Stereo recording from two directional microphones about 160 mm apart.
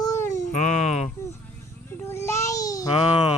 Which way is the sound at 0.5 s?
45° left (ahead or behind).